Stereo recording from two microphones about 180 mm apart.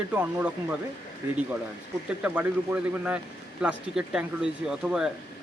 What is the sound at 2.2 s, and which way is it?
A man's voice, 10° right (ahead or behind).